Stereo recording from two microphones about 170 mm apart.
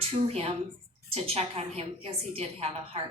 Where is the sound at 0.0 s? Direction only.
35° right (ahead or behind).